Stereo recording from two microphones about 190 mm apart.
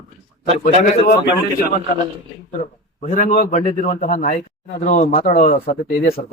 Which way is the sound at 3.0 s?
40° left (ahead or behind).